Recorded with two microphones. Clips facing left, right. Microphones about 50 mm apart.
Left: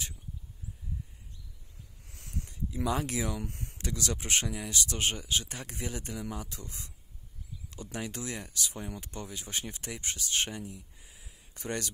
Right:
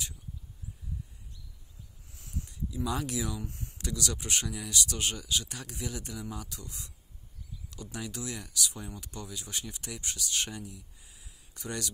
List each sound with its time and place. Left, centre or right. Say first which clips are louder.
2.0 s a sound: left 1 dB; left
2.5 s speech: left 2 dB; left
3.3 s speech: left 1 dB; left
3.7 s speech: even; left